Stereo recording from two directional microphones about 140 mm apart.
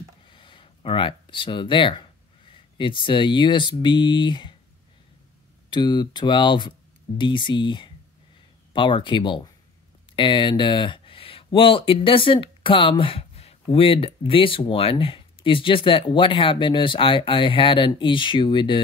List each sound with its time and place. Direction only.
0.3 s speech: 35° left (ahead or behind)
5.7 s speech: 35° left (ahead or behind)